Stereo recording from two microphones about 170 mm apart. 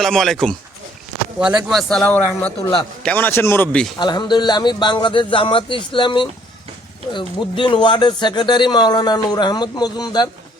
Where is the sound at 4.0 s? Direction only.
25° left (ahead or behind).